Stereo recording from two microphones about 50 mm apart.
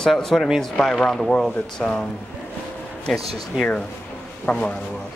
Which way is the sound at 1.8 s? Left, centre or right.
Left.